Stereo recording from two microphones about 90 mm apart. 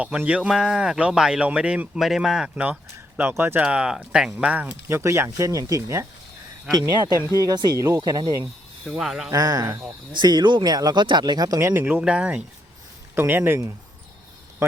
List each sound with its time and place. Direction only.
0.2 s speech: 15° right (ahead or behind)
3.2 s speech: 25° right (ahead or behind)
7.2 s speech: 35° left (ahead or behind)
7.4 s speech: 50° right (ahead or behind)
7.8 s speech: 35° right (ahead or behind)
8.9 s speech: 5° right (ahead or behind)
9.3 s speech: 40° right (ahead or behind)
10.1 s speech: 55° right (ahead or behind)
11.6 s speech: 25° right (ahead or behind)
13.1 s speech: 20° right (ahead or behind)